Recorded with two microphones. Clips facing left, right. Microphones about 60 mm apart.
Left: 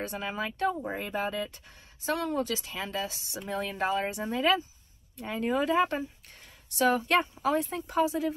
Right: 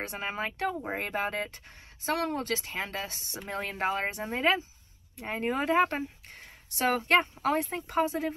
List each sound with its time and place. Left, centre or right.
0.0 s a woman's voice: right